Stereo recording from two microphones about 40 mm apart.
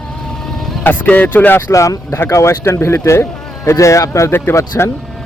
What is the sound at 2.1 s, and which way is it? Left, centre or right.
Speech, left.